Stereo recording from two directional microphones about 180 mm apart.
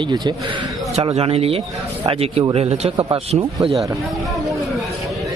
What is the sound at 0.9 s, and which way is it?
A man's voice, 35° right (ahead or behind).